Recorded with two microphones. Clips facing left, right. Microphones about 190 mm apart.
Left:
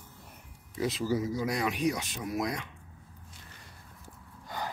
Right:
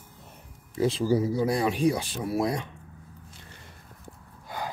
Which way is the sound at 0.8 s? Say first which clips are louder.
Right 6 dB; 30° right (ahead or behind).